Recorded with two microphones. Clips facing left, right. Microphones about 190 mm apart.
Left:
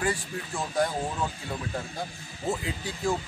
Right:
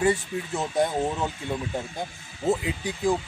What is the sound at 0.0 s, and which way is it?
Speech, 20° right (ahead or behind).